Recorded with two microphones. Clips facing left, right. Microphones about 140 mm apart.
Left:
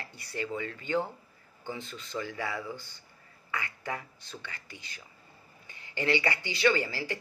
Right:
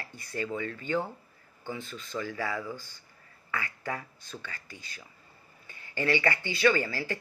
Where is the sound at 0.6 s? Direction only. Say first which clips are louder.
Right 2 dB; 40° right (ahead or behind).